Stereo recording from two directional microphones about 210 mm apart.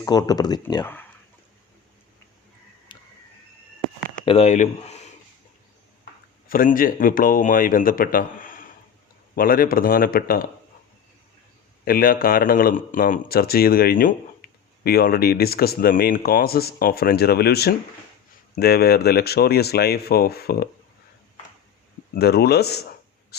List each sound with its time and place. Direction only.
0.0 s speech: 20° left (ahead or behind)
2.9 s a sound: 20° left (ahead or behind)
4.3 s speech: 30° left (ahead or behind)
6.5 s a man's voice: 40° left (ahead or behind)
11.9 s speech: 45° left (ahead or behind)
14.4 s a sound: 45° left (ahead or behind)
14.8 s speech: 45° left (ahead or behind)
22.1 s speech: 50° left (ahead or behind)
23.3 s mouse: 50° left (ahead or behind)